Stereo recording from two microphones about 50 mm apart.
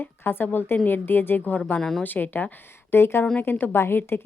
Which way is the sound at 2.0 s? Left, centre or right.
Left.